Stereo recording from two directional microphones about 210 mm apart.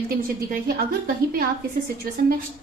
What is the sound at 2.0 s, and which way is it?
Speech, 45° right (ahead or behind).